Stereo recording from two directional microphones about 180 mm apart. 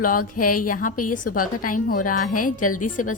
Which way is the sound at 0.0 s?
50° left (ahead or behind).